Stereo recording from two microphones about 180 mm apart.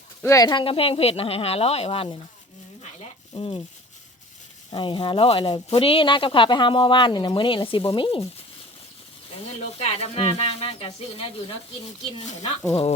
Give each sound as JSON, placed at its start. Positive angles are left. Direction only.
{"t": 0.2, "sound": "speech", "side_deg": 15}
{"t": 3.3, "sound": "speech", "side_deg": 30}
{"t": 4.7, "sound": "speech", "side_deg": 25}
{"t": 9.4, "sound": "speech", "side_deg": 35}